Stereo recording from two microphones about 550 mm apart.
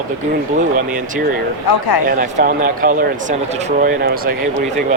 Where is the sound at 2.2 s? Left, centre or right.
Centre.